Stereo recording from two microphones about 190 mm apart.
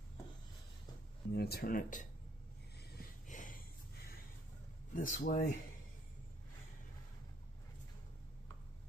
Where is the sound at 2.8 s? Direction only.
45° left (ahead or behind).